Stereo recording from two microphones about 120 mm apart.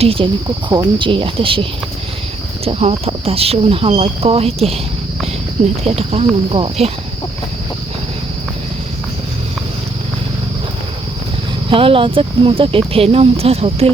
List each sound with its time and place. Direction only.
0.0 s speech: 50° right (ahead or behind)
0.4 s speech: 35° right (ahead or behind)
2.6 s speech: 55° right (ahead or behind)
11.7 s speech: 45° right (ahead or behind)